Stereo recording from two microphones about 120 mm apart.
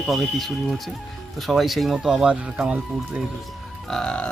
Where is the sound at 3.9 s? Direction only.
5° left (ahead or behind).